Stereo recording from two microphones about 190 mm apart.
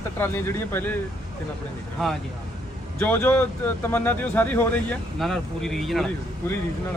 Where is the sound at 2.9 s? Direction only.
10° left (ahead or behind).